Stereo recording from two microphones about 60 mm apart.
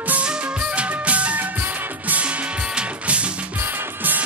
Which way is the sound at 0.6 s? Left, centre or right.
Right.